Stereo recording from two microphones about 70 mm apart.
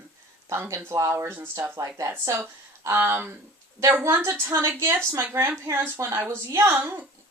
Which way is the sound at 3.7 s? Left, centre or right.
Right.